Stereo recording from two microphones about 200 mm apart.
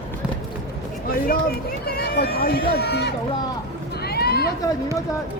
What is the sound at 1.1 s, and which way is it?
Speech, 45° left (ahead or behind).